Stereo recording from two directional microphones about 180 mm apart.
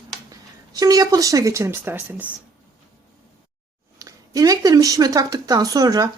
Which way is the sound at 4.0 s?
20° right (ahead or behind).